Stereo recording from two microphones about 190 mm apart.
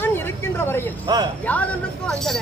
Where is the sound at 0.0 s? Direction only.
10° left (ahead or behind).